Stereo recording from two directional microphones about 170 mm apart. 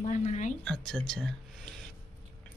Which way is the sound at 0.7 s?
5° left (ahead or behind).